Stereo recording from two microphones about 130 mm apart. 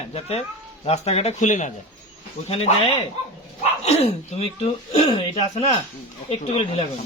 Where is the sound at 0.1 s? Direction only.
50° left (ahead or behind); by 1.7 s 70° left (ahead or behind).